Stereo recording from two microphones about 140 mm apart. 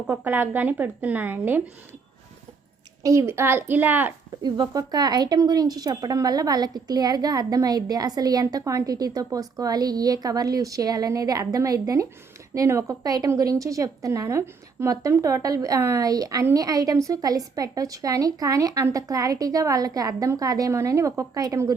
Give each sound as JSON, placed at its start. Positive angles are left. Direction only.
{"t": 0.0, "sound": "speech", "side_deg": -10}
{"t": 3.0, "sound": "speech", "side_deg": -20}
{"t": 4.4, "sound": "a woman's voice", "side_deg": -30}